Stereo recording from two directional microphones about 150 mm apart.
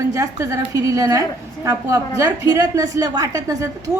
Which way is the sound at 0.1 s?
20° right (ahead or behind).